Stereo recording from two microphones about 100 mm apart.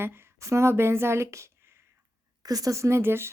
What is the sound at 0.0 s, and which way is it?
Speech, 25° right (ahead or behind).